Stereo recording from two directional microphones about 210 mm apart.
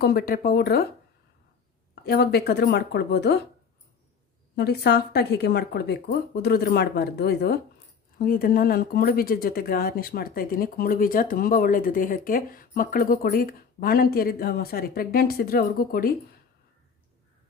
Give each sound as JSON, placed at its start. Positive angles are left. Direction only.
{"t": 0.0, "sound": "speech", "side_deg": 45}
{"t": 2.0, "sound": "speech", "side_deg": 50}
{"t": 4.5, "sound": "speech", "side_deg": 50}